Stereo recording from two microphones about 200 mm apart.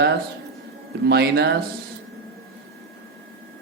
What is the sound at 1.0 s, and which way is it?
Speech, 55° right (ahead or behind).